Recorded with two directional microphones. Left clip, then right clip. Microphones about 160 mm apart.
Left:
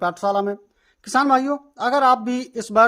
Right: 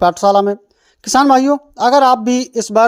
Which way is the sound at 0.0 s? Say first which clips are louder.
Right 10 dB; 40° right (ahead or behind).